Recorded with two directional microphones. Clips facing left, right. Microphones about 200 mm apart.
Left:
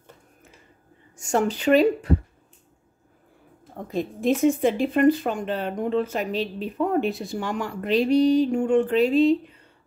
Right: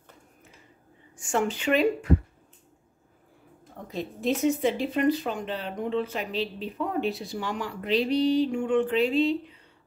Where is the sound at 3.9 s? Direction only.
50° left (ahead or behind).